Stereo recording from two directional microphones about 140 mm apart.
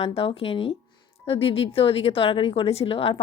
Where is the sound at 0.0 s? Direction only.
45° left (ahead or behind).